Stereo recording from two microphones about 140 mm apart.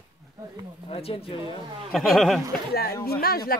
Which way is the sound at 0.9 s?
45° left (ahead or behind).